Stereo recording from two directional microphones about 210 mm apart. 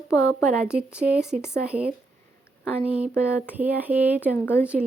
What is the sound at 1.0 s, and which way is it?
Speech, 40° right (ahead or behind).